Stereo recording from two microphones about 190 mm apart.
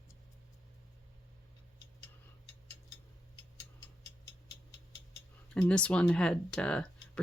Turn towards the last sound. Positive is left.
turn(degrees=5)  # may be behind; listen again after turning